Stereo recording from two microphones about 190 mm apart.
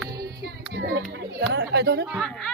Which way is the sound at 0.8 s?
65° right (ahead or behind).